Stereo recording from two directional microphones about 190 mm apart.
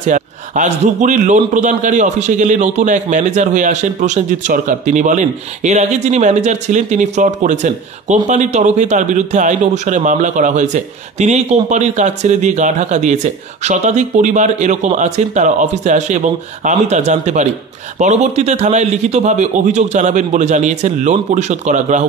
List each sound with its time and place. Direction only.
0.0 s a man's voice: 40° right (ahead or behind)